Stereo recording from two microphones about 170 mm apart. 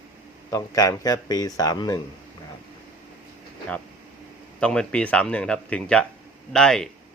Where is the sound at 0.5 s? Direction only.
20° left (ahead or behind).